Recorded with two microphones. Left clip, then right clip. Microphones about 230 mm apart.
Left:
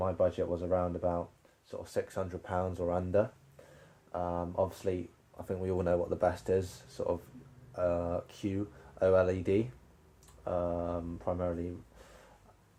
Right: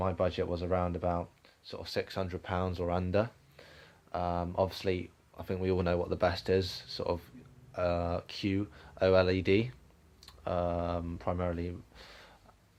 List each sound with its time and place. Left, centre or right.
0.0 s speech: right